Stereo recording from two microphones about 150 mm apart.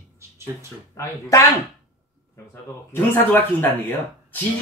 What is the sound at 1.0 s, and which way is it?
Speech, 20° left (ahead or behind).